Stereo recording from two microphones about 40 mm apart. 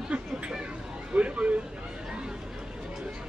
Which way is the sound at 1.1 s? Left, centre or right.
Right.